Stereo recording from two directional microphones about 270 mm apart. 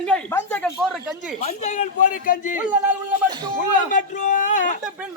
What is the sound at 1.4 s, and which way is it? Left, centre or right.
Speech, left.